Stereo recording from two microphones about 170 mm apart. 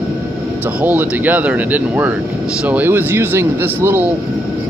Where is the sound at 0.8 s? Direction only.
10° right (ahead or behind).